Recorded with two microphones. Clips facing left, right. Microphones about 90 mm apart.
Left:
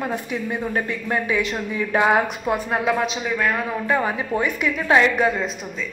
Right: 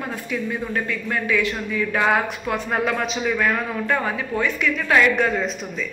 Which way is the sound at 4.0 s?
15° left (ahead or behind).